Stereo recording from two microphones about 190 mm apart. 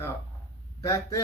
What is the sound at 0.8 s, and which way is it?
Speech, 15° left (ahead or behind).